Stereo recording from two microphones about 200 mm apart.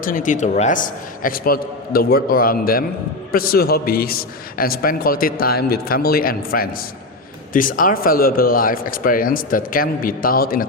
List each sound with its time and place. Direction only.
0.0 s a man's voice: 45° left (ahead or behind)